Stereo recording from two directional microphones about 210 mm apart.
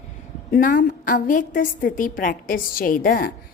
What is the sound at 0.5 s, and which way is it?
A woman's voice, 40° left (ahead or behind).